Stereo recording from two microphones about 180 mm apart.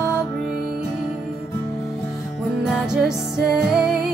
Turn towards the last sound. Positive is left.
turn(degrees=-5)  # may be behind; listen again after turning